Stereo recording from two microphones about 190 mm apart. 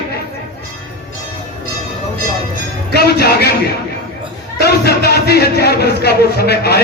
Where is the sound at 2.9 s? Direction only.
55° left (ahead or behind).